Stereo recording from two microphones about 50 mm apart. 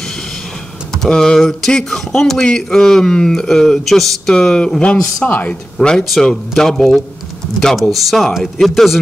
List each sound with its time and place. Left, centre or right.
0.9 s a man's voice: centre
4.3 s a man's voice: centre
5.2 s speech: left
5.8 s a man's voice: centre
7.9 s speech: centre